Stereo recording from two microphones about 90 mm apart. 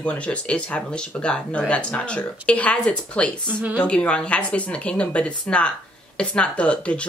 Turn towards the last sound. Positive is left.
turn(degrees=15)  # may be behind; listen again after turning